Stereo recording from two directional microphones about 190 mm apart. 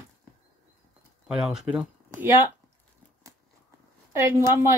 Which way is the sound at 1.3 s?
5° right (ahead or behind).